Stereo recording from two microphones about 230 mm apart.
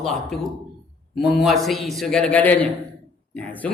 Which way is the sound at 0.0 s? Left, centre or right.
Centre.